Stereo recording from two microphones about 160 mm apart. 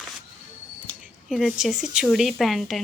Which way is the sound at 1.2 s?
5° right (ahead or behind).